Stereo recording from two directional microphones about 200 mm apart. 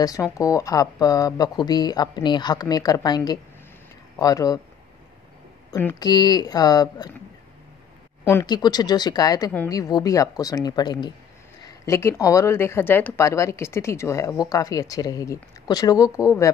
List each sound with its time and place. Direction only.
0.0 s speech: 15° left (ahead or behind)
5.7 s speech: 15° left (ahead or behind)
8.3 s speech: 15° left (ahead or behind)